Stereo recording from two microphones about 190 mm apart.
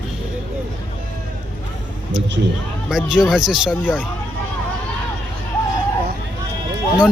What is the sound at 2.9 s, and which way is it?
Speech, 5° right (ahead or behind).